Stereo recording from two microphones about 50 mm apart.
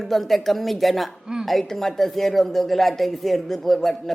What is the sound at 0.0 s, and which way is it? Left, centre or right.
Speech, centre.